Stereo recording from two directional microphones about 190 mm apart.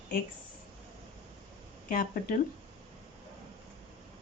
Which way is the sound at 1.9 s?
50° left (ahead or behind).